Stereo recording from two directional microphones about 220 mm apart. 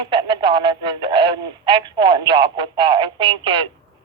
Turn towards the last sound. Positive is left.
turn(degrees=-20)  # may be behind; listen again after turning